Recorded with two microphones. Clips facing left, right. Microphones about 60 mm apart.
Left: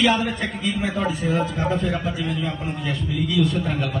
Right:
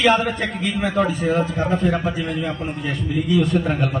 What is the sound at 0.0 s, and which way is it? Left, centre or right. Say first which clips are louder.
A man's voice: right 3 dB; right.